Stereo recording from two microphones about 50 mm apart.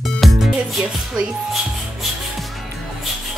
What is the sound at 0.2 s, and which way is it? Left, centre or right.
Music, centre.